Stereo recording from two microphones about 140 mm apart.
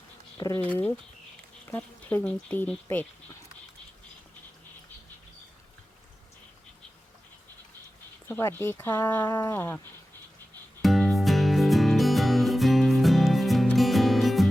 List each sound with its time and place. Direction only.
0.3 s speech: 25° left (ahead or behind)
0.6 s speech: 10° left (ahead or behind)
8.3 s speech: 15° left (ahead or behind)
10.8 s music: centre (ahead or behind)